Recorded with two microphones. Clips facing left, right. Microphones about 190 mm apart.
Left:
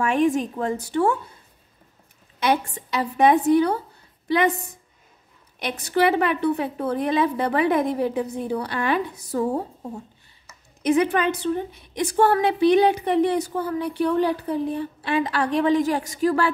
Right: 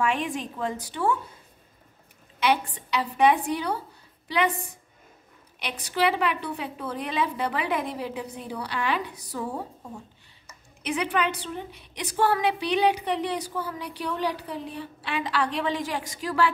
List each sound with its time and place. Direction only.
0.0 s a woman's voice: 45° left (ahead or behind)
2.4 s a woman's voice: 45° left (ahead or behind)
5.6 s a woman's voice: 50° left (ahead or behind)
10.8 s a woman's voice: 45° left (ahead or behind)